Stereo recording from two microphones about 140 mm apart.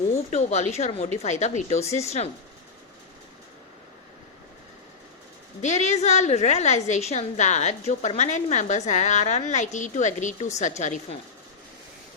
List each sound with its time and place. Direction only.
0.1 s a woman's voice: 55° left (ahead or behind)
5.6 s a woman's voice: 55° left (ahead or behind)